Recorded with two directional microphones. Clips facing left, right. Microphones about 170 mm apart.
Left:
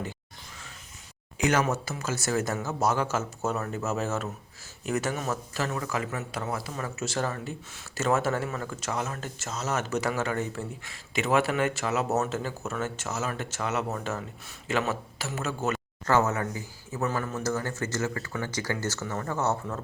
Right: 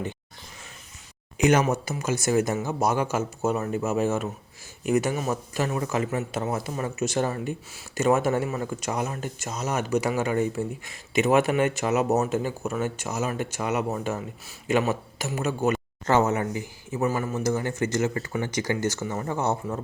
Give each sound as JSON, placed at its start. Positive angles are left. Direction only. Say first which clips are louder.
{"t": 1.4, "sound": "a man's voice", "louder": "right 4 dB", "side_deg": -20}